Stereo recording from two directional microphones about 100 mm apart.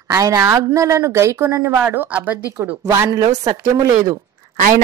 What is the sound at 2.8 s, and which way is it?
Speech, 30° right (ahead or behind).